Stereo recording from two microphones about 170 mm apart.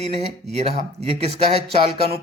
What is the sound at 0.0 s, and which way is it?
Speech, 40° right (ahead or behind).